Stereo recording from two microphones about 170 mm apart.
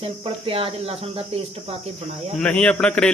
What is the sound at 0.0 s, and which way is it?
Speech, 35° right (ahead or behind).